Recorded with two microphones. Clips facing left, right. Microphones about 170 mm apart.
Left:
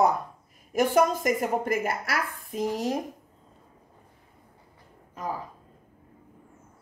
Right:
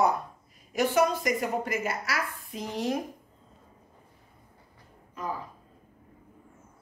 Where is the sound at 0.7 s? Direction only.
50° left (ahead or behind).